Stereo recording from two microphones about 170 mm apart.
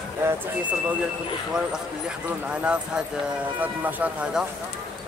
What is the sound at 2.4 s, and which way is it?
Speech, 5° right (ahead or behind).